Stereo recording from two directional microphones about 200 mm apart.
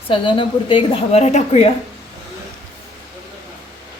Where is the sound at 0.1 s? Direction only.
25° left (ahead or behind).